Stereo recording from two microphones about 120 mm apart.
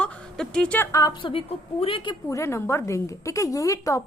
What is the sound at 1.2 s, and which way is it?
Speech, 50° left (ahead or behind).